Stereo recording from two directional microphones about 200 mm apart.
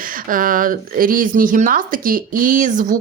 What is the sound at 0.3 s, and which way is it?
Speech, 45° right (ahead or behind).